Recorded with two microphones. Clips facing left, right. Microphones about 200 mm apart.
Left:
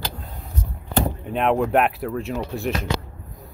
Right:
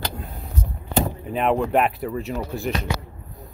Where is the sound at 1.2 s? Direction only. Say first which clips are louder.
Left 2 dB; centre (ahead or behind).